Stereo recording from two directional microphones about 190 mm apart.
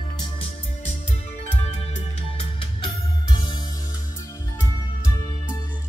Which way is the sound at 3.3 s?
25° left (ahead or behind).